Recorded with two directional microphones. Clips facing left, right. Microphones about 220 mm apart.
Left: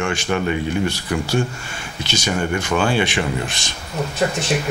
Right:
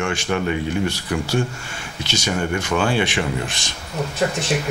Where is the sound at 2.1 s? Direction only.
10° left (ahead or behind).